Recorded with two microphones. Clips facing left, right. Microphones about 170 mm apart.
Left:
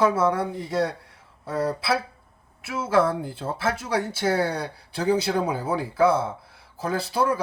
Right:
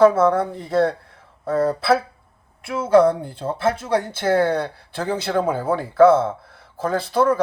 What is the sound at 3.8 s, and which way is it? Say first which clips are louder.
Speech: right 4 dB; 55° right (ahead or behind).